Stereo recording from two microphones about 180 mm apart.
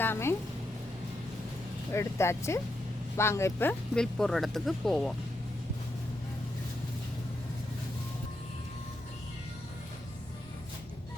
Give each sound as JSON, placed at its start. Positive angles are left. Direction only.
{"t": 0.0, "sound": "a woman's voice", "side_deg": 15}
{"t": 1.9, "sound": "speech", "side_deg": 15}